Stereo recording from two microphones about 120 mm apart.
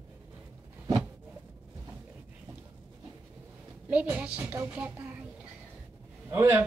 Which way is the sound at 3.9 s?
10° right (ahead or behind).